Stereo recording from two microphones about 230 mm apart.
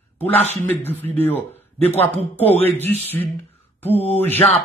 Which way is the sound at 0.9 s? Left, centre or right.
Centre.